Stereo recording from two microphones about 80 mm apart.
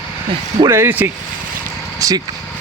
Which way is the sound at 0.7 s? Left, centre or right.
Right.